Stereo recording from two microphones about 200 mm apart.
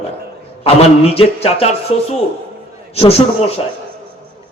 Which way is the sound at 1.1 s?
30° left (ahead or behind).